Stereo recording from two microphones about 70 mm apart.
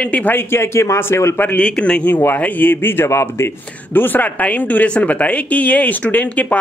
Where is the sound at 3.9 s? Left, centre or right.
Left.